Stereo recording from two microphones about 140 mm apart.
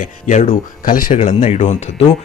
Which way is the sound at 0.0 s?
65° left (ahead or behind).